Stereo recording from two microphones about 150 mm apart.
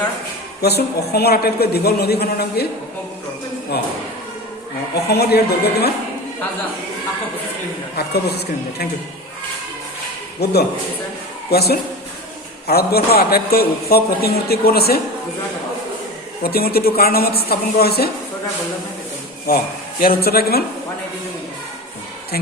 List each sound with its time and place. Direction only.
0.6 s a man's voice: 90° left
3.7 s a man's voice: 90° left
5.0 s a man's voice: 90° left
10.4 s a man's voice: 90° left
16.4 s a man's voice: 85° left
19.5 s a man's voice: 75° left (ahead or behind); by 20.7 s 90° left